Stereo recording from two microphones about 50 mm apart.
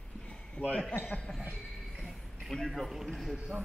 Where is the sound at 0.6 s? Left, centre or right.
Left.